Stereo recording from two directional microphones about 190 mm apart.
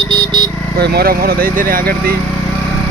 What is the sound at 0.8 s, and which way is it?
Speech, 60° right (ahead or behind).